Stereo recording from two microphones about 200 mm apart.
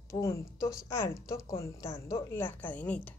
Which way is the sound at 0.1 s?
15° left (ahead or behind).